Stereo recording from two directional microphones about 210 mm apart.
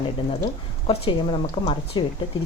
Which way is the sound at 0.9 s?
25° left (ahead or behind).